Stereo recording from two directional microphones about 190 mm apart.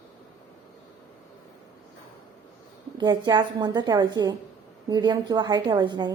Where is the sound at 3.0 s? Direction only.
20° right (ahead or behind).